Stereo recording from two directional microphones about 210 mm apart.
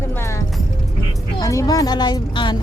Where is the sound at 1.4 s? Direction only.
15° left (ahead or behind).